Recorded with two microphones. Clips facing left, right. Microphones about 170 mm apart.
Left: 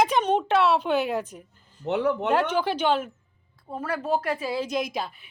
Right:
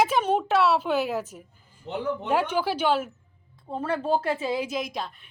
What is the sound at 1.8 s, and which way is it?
Speech, 70° left (ahead or behind).